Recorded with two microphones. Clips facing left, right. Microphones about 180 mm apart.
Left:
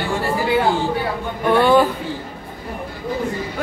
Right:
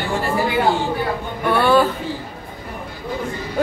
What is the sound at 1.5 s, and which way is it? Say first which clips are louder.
Speech: left 2 dB; 20° left (ahead or behind).